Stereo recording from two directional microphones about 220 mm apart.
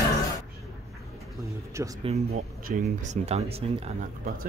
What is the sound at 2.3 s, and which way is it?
Speech, 45° right (ahead or behind).